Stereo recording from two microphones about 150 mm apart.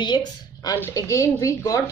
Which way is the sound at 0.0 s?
30° left (ahead or behind).